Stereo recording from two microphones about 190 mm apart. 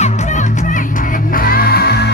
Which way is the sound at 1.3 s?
50° left (ahead or behind).